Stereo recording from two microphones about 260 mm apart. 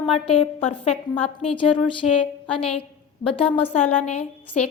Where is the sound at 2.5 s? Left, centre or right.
Left.